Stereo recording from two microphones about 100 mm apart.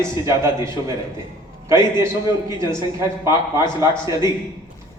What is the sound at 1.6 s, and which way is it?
A man's voice, 30° right (ahead or behind).